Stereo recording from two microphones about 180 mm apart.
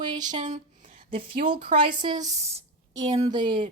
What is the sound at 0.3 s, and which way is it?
Speech, 45° right (ahead or behind).